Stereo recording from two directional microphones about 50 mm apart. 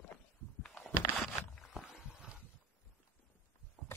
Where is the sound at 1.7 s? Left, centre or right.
Centre.